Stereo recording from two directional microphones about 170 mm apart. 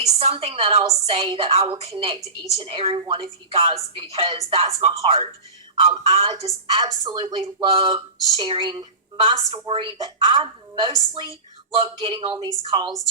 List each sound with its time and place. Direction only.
0.1 s a woman's voice: 40° right (ahead or behind)
6.4 s a woman's voice: 25° right (ahead or behind)